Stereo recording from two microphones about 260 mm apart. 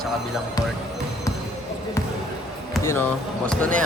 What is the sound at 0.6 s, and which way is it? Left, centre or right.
Speech, centre.